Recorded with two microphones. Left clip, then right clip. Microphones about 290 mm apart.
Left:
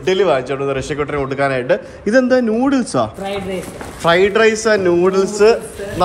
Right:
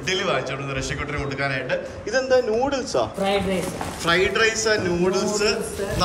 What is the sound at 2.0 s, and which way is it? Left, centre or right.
A man's voice, left.